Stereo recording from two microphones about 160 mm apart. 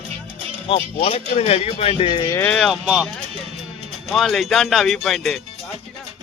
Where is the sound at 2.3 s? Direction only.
10° left (ahead or behind).